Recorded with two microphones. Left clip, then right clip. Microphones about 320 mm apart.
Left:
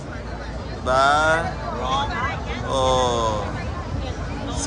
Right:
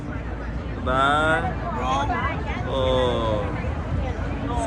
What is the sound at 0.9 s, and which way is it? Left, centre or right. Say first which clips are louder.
Speech: left 3 dB; centre.